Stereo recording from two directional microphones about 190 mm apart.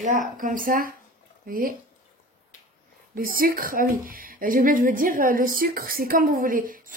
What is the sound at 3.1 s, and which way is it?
Speech, 50° right (ahead or behind).